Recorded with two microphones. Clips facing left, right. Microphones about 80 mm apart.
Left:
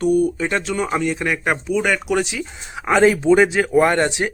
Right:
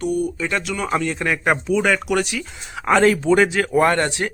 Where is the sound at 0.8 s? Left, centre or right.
Centre.